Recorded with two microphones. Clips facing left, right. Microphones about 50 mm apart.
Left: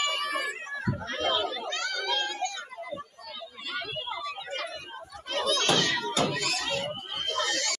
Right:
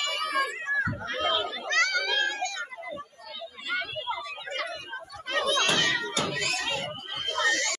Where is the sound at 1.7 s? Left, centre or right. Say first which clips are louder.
Right 7 dB; right.